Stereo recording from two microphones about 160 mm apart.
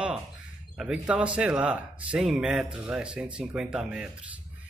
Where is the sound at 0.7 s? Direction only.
5° right (ahead or behind).